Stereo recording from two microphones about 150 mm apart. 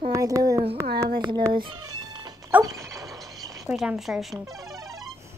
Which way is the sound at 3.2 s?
25° right (ahead or behind).